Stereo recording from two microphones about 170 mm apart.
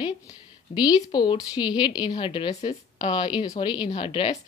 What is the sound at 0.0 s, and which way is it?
A woman's voice, 25° left (ahead or behind).